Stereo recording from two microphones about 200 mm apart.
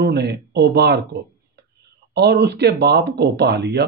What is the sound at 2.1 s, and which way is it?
Speech, 55° right (ahead or behind).